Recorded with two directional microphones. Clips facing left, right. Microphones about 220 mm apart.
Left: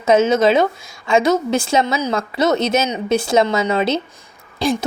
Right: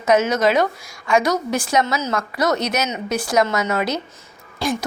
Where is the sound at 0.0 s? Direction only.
25° left (ahead or behind).